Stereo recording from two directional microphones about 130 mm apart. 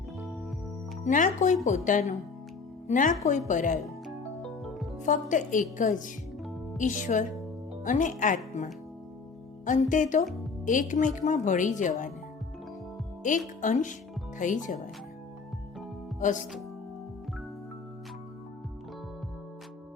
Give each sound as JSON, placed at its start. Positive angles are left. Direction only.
{"t": 1.0, "sound": "a woman's voice", "side_deg": 75}
{"t": 4.6, "sound": "music", "side_deg": 0}
{"t": 5.0, "sound": "a woman's voice", "side_deg": 75}
{"t": 9.6, "sound": "a woman's voice", "side_deg": 80}
{"t": 13.2, "sound": "a woman's voice", "side_deg": 80}